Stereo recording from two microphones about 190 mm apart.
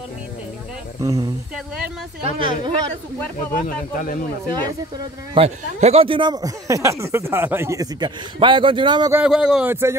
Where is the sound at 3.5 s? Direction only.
45° left (ahead or behind).